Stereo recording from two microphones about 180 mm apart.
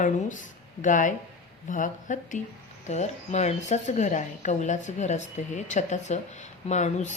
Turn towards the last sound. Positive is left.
turn(degrees=40)  # may be behind; listen again after turning